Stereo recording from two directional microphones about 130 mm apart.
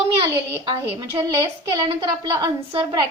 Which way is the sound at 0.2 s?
40° right (ahead or behind).